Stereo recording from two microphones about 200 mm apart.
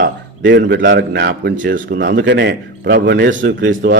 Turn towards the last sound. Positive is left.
turn(degrees=-65)  # may be behind; listen again after turning